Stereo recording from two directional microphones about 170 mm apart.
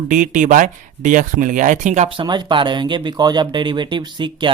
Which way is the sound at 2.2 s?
25° right (ahead or behind).